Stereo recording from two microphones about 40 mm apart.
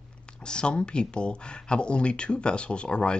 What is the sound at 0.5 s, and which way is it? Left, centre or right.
Speech, left.